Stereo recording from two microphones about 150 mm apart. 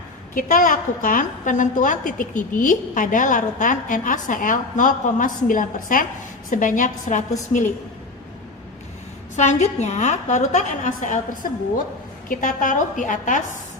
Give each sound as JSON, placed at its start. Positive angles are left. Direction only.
{"t": 0.3, "sound": "a woman's voice", "side_deg": 60}
{"t": 9.3, "sound": "a woman's voice", "side_deg": 50}
{"t": 12.3, "sound": "a woman's voice", "side_deg": 60}